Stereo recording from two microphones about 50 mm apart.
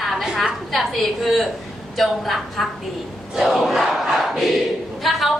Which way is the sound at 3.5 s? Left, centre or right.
Centre.